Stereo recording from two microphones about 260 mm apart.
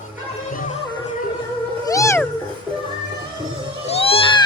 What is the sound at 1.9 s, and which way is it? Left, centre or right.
Cat, centre.